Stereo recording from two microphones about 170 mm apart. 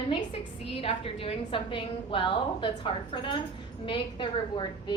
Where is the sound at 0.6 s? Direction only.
35° left (ahead or behind).